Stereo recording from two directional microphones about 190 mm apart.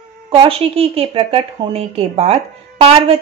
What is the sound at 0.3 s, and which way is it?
A woman's voice, 30° right (ahead or behind).